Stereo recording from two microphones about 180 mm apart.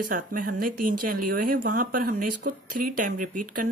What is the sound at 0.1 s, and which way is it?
Speech, 50° right (ahead or behind).